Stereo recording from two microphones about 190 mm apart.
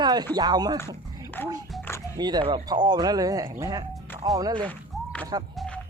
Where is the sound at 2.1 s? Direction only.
20° right (ahead or behind).